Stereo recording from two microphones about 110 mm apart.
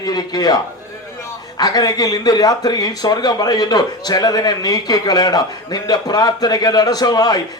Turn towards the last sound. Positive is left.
turn(degrees=35)  # may be behind; listen again after turning